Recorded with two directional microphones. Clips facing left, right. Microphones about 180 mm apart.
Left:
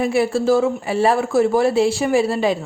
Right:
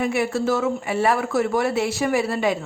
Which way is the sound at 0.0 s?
30° left (ahead or behind).